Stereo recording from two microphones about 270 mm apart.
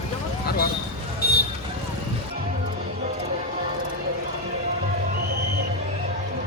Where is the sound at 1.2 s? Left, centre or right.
Left.